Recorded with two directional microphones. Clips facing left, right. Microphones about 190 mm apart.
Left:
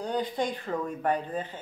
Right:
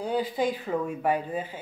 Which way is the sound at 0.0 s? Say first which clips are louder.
Right 3 dB; 5° right (ahead or behind).